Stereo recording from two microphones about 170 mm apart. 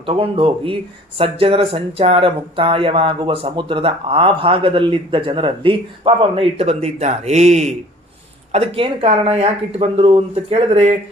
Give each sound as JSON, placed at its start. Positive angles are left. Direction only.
{"t": 0.0, "sound": "speech", "side_deg": -35}